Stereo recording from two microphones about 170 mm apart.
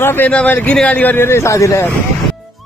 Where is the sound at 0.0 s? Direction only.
10° left (ahead or behind).